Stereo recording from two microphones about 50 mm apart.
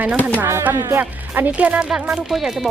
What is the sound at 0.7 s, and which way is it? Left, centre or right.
Speech, right.